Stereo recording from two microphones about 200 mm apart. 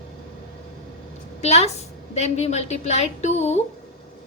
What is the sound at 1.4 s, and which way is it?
A woman's voice, 30° left (ahead or behind).